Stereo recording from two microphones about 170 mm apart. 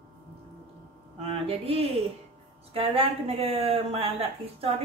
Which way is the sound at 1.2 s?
35° right (ahead or behind).